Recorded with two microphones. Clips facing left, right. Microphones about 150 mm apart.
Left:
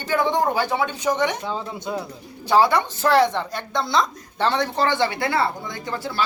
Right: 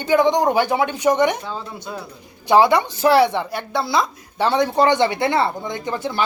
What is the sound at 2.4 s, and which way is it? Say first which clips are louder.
A woman's voice: right 3 dB; 15° right (ahead or behind).